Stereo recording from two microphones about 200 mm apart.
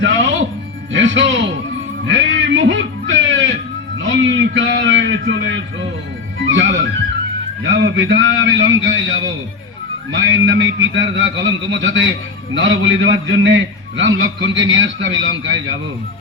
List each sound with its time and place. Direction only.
0.0 s music: 65° right (ahead or behind)
0.9 s speech: 65° right (ahead or behind)
2.0 s music: 65° right (ahead or behind)
4.0 s a sound: 70° right (ahead or behind)
6.4 s music: 70° right (ahead or behind)
7.6 s a man's voice: 70° right (ahead or behind)